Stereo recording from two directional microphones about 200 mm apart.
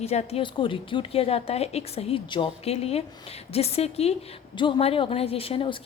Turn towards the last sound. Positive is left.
turn(degrees=25)  # may be behind; listen again after turning